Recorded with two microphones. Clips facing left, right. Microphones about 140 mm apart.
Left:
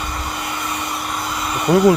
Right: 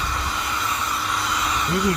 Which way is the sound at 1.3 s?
55° left (ahead or behind).